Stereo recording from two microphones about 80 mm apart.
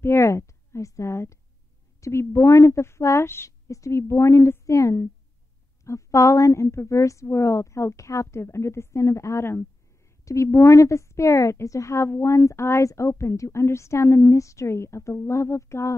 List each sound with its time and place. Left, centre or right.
0.0 s a woman's voice: left